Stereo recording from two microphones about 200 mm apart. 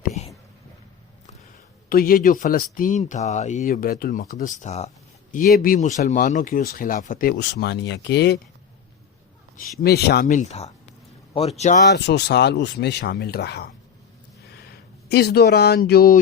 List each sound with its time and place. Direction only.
1.9 s speech: 45° left (ahead or behind)
9.8 s speech: 50° left (ahead or behind); by 11.8 s 35° left (ahead or behind)
11.9 s speech: 55° left (ahead or behind)
15.1 s speech: 55° left (ahead or behind)